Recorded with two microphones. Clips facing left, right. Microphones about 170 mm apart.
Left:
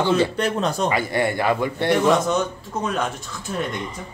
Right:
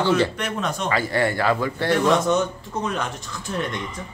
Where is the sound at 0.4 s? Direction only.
35° left (ahead or behind).